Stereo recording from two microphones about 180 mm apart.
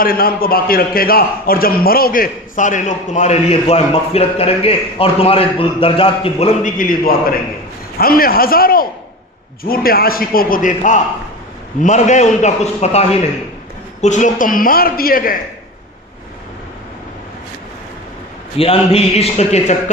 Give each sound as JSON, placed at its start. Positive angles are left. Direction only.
{"t": 0.0, "sound": "a man's voice", "side_deg": 55}
{"t": 6.6, "sound": "a man's voice", "side_deg": 50}
{"t": 18.5, "sound": "a man's voice", "side_deg": 30}